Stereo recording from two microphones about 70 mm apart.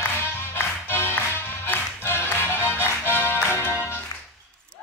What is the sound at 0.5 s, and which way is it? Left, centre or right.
Music, left.